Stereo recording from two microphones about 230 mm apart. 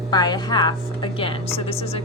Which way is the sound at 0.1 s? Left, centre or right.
Centre.